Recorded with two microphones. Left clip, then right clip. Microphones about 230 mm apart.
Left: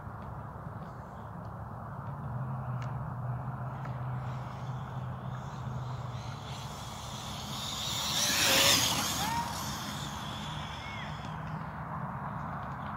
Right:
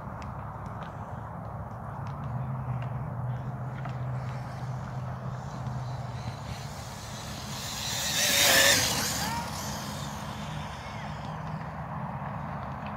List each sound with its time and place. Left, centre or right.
7.6 s vehicle: centre
8.5 s vehicle: centre